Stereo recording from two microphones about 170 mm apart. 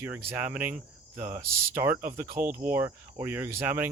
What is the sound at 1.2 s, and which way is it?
Cricket, 50° right (ahead or behind).